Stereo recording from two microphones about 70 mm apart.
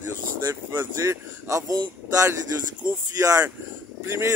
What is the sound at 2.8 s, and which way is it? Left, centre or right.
Speech, right.